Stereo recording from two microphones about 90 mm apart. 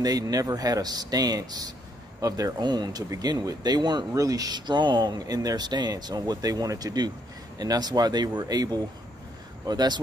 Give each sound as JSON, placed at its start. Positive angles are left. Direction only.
{"t": 0.0, "sound": "speech", "side_deg": -45}
{"t": 4.1, "sound": "speech", "side_deg": -40}